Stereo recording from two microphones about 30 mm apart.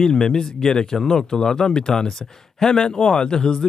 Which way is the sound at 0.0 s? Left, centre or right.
Centre.